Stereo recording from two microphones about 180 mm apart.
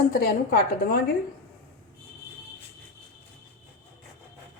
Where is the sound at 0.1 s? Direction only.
55° left (ahead or behind).